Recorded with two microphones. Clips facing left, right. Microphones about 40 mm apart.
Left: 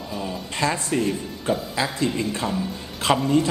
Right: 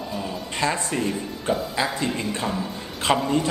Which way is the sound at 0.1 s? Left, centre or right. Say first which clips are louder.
Left 3 dB; centre.